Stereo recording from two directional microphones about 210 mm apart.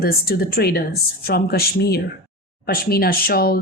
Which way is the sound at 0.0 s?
45° left (ahead or behind).